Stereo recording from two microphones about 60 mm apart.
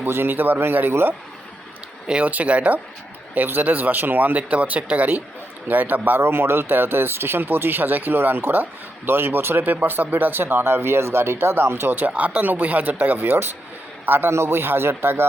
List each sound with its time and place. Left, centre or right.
0.0 s speech: right
2.0 s speech: right
12.0 s a man's voice: right
14.3 s speech: right